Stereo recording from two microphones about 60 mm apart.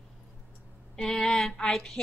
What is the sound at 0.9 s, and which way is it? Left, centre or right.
Speech, centre.